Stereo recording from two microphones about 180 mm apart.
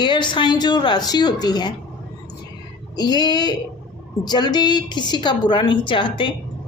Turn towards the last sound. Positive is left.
turn(degrees=25)  # may be behind; listen again after turning